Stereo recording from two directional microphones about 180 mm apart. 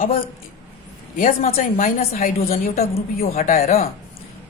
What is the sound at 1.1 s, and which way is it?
Speech, 50° left (ahead or behind).